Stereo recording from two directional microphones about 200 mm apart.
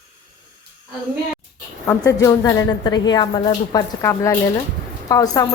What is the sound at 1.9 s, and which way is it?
A woman's voice, 15° left (ahead or behind).